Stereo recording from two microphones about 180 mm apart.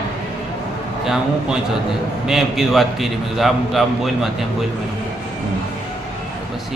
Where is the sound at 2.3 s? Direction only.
Centre (ahead or behind).